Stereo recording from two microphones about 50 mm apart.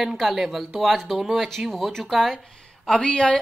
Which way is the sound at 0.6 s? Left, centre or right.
Centre.